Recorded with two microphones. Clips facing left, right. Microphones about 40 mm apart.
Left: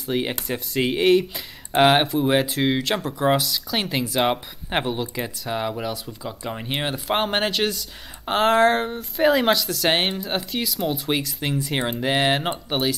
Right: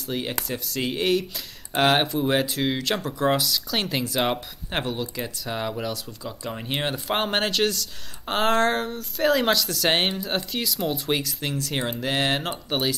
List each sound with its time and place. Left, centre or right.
0.0 s speech: left
8.8 s speech: left
9.3 s speech: centre
11.5 s speech: centre